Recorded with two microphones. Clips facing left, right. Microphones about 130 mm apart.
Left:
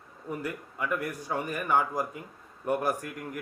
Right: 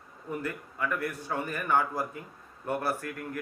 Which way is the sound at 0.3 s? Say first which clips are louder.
Even; 15° left (ahead or behind).